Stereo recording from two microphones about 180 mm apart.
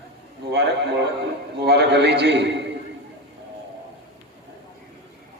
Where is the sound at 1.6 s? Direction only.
65° right (ahead or behind).